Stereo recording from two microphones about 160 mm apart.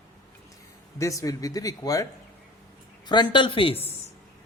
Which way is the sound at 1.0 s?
20° left (ahead or behind).